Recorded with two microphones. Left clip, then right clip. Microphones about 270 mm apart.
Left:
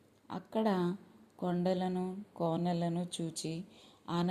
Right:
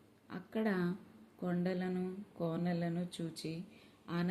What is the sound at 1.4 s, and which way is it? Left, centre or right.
Speech, left.